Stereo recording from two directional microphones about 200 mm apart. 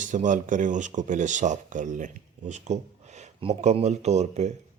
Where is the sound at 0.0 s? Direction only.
40° right (ahead or behind).